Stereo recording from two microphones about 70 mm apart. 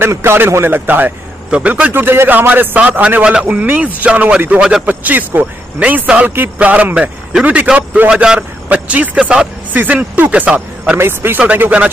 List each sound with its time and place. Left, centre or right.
0.0 s a man's voice: right; by 4.8 s centre
4.8 s a man's voice: right
11.0 s a man's voice: right